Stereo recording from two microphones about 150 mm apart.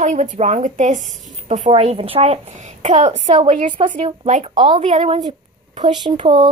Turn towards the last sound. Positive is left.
turn(degrees=-35)  # may be behind; listen again after turning